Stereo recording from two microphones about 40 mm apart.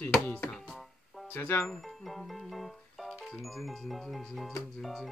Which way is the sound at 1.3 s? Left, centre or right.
Left.